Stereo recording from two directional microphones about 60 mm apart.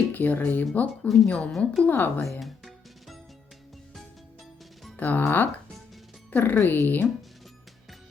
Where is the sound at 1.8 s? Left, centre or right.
Left.